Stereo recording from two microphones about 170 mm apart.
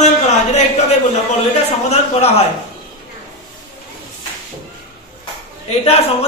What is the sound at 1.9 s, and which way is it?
Speech, 40° left (ahead or behind).